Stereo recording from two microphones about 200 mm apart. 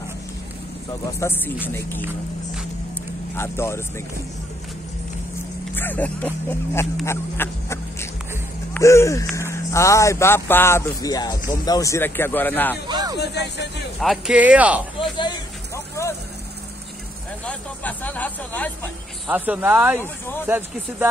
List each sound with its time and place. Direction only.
1.2 s speech: 10° left (ahead or behind)
3.3 s speech: 15° left (ahead or behind)
5.8 s speech: 10° left (ahead or behind)
7.1 s a sound: 15° left (ahead or behind)
8.7 s speech: 15° left (ahead or behind)
12.8 s speech: 20° right (ahead or behind)
13.2 s speech: 55° left (ahead or behind)
13.9 s speech: centre (ahead or behind)
15.0 s a sound: 25° left (ahead or behind)
17.5 s speech: 10° left (ahead or behind)
19.2 s speech: 10° right (ahead or behind)
20.0 s speech: 10° left (ahead or behind)
20.4 s speech: 10° right (ahead or behind)